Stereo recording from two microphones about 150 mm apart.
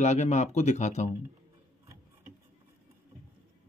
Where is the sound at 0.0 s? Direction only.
50° left (ahead or behind).